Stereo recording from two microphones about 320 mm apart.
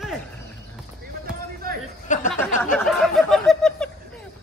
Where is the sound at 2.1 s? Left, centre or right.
Left.